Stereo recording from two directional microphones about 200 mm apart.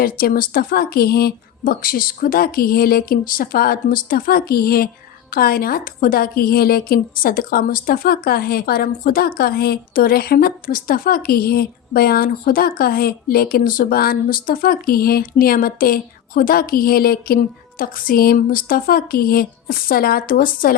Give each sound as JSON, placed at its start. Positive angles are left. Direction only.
{"t": 0.0, "sound": "a woman's voice", "side_deg": 45}